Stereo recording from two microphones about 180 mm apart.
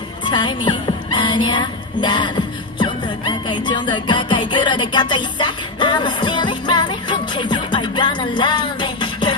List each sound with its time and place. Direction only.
0.2 s speech: 25° left (ahead or behind)